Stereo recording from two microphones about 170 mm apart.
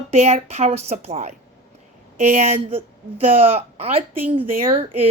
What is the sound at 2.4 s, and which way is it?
Speech, 35° right (ahead or behind).